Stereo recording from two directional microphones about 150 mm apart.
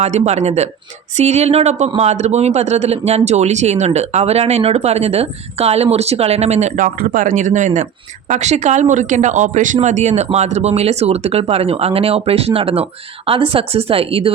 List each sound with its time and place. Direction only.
0.0 s speech: 50° right (ahead or behind)